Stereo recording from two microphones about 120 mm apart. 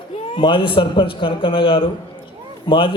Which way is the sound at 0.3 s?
45° left (ahead or behind).